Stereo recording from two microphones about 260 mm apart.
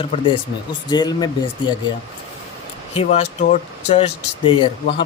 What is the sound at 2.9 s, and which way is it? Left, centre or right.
Speech, left.